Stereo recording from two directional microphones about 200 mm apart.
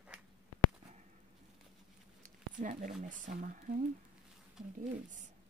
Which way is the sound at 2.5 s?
40° right (ahead or behind).